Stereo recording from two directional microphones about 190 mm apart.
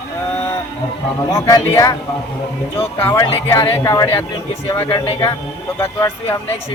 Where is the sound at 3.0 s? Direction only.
15° left (ahead or behind).